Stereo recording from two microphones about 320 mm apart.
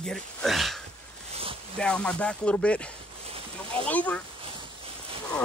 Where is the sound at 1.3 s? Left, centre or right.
Centre.